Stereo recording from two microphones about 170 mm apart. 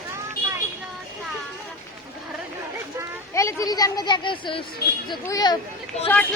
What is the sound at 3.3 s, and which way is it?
Speech, 20° left (ahead or behind).